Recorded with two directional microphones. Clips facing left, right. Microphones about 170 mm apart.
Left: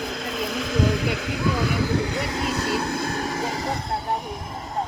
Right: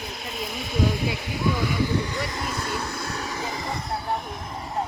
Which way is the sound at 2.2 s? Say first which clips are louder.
Left 5 dB; 70° left (ahead or behind).